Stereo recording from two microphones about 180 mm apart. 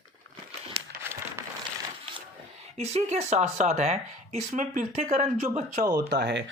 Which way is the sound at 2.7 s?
35° right (ahead or behind).